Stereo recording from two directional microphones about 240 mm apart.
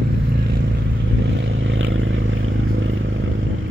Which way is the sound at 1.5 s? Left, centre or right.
Right.